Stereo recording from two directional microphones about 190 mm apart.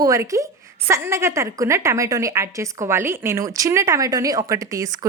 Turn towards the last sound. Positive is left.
turn(degrees=-20)  # may be behind; listen again after turning